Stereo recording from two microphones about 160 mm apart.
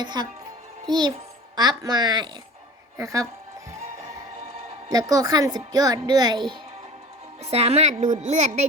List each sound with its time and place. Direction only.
0.0 s a child's voice: 30° right (ahead or behind)
4.9 s a child's voice: 20° right (ahead or behind)
7.5 s a woman's voice: 40° right (ahead or behind)